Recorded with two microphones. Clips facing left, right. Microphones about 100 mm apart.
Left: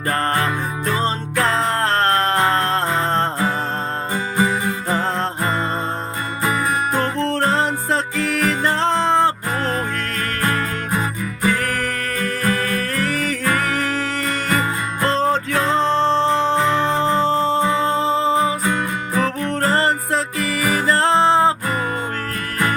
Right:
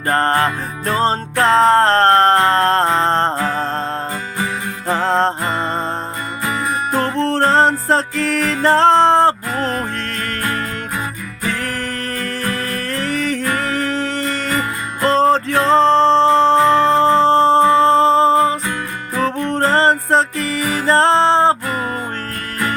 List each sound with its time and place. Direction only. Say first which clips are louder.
0.1 s music: right 4 dB; 35° right (ahead or behind)
5.0 s music: right 6 dB; 35° right (ahead or behind)
6.4 s music: left 1 dB; 30° left (ahead or behind)
7.2 s music: right 8 dB; 35° right (ahead or behind)
9.6 s music: right 1 dB; 30° left (ahead or behind)
11.6 s music: left 1 dB; 35° right (ahead or behind)
13.0 s music: right 4 dB; 40° left (ahead or behind)
13.6 s music: right 2 dB; 35° right (ahead or behind)
19.4 s music: right 3 dB; 25° right (ahead or behind)
20.6 s music: left 1 dB; 45° left (ahead or behind)
20.8 s music: right 4 dB; 30° right (ahead or behind)